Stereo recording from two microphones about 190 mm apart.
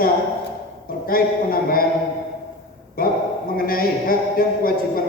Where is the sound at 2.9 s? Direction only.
50° left (ahead or behind).